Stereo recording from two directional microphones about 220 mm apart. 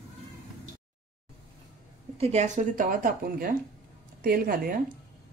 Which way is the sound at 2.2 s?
30° right (ahead or behind).